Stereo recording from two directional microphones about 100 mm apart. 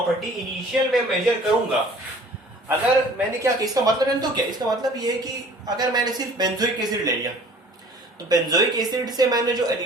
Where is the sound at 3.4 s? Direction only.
40° right (ahead or behind).